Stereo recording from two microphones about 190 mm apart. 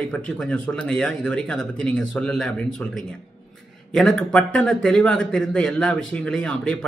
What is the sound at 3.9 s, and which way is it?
A man's voice, centre (ahead or behind).